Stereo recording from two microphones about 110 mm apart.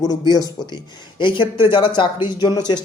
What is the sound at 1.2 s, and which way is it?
Speech, 50° left (ahead or behind).